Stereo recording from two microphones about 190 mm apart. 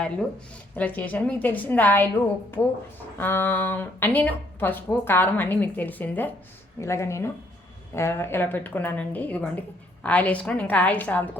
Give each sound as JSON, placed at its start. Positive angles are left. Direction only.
{"t": 0.8, "sound": "speech", "side_deg": 10}
{"t": 3.2, "sound": "speech", "side_deg": 10}